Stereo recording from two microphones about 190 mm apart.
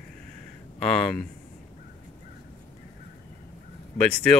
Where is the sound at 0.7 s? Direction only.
5° left (ahead or behind).